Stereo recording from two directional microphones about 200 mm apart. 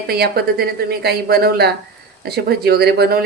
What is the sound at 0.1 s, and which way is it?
Speech, 50° right (ahead or behind).